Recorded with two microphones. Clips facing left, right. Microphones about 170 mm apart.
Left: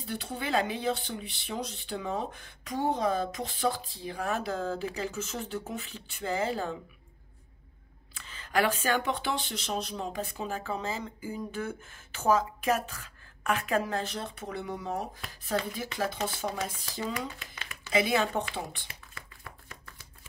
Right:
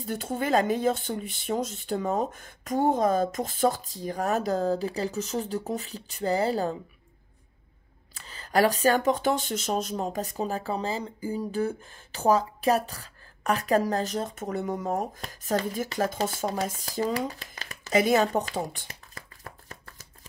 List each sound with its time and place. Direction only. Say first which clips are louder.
0.0 s speech: right 6 dB; 45° right (ahead or behind)
8.1 s speech: right 5 dB; 40° right (ahead or behind)